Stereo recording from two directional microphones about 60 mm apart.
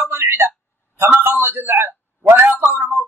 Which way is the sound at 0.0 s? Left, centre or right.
Right.